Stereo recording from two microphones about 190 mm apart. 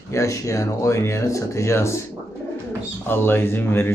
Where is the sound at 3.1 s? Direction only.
10° left (ahead or behind).